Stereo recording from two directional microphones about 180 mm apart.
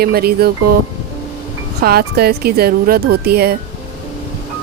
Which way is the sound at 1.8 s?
60° right (ahead or behind).